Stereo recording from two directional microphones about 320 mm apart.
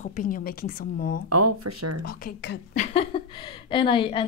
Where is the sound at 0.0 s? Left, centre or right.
Left.